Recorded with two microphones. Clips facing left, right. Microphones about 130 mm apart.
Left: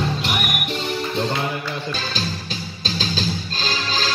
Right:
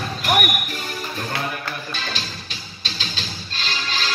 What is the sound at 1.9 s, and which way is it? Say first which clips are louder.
Music: left 4 dB; 35° left (ahead or behind).